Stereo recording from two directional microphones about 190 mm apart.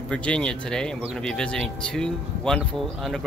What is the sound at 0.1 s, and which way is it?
Speech, 5° left (ahead or behind).